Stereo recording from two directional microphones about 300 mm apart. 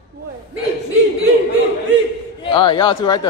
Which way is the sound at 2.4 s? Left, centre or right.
Centre.